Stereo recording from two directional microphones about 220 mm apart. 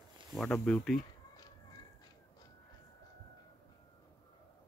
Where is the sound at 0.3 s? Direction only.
5° left (ahead or behind).